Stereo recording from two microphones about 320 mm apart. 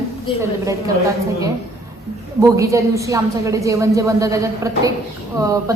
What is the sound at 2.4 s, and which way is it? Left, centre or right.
A woman's voice, centre.